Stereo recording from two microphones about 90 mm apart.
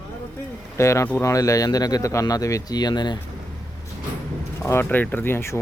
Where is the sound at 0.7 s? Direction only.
35° left (ahead or behind); by 3.2 s 55° left (ahead or behind).